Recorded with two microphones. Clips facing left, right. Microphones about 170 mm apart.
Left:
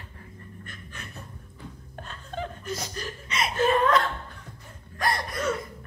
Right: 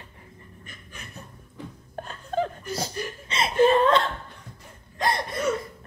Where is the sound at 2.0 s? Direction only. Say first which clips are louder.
Right 8 dB; 35° right (ahead or behind).